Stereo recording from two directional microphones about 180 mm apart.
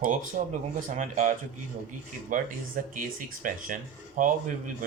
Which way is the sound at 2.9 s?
45° right (ahead or behind).